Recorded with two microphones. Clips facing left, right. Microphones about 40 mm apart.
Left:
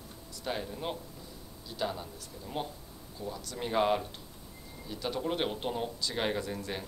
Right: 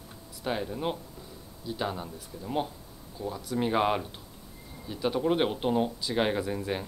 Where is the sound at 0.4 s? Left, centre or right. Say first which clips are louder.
Right 5 dB; centre.